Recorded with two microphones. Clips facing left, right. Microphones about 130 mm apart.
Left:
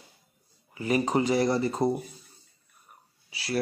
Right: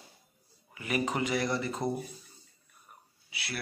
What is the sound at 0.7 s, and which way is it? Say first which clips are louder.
Speech: left 6 dB; 30° left (ahead or behind).